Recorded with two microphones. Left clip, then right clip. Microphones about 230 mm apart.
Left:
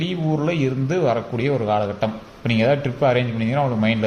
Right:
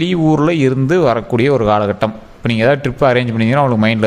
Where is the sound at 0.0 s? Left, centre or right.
Right.